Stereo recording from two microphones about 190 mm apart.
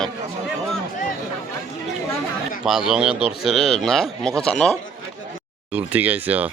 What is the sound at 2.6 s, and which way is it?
Speech, centre (ahead or behind).